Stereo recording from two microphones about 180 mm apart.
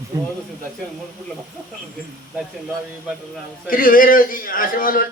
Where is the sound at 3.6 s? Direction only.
50° left (ahead or behind).